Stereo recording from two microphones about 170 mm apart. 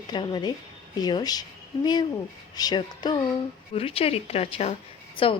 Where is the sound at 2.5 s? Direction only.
25° left (ahead or behind).